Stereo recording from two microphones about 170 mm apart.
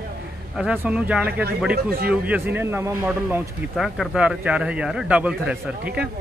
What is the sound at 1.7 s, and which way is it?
Speech, 65° right (ahead or behind).